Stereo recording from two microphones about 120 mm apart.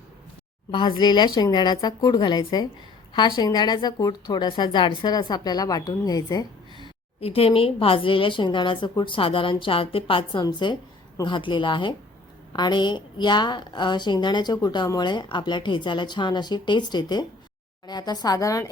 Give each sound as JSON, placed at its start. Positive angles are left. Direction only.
{"t": 0.7, "sound": "a woman's voice", "side_deg": 40}
{"t": 7.2, "sound": "a woman's voice", "side_deg": 55}